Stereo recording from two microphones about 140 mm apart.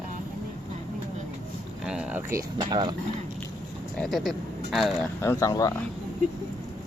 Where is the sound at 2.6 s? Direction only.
35° right (ahead or behind).